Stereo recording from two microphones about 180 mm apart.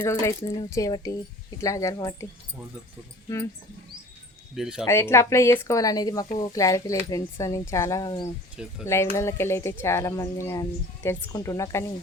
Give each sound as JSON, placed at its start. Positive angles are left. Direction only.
{"t": 0.0, "sound": "speech", "side_deg": 15}
{"t": 4.5, "sound": "speech", "side_deg": -5}
{"t": 4.9, "sound": "speech", "side_deg": 15}